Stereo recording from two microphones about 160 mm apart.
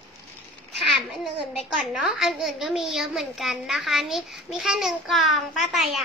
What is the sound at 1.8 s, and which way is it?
A child's voice, centre (ahead or behind).